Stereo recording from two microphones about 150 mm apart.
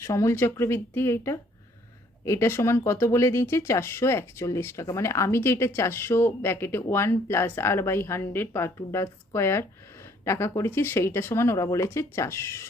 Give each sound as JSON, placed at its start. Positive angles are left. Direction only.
{"t": 0.0, "sound": "speech", "side_deg": 20}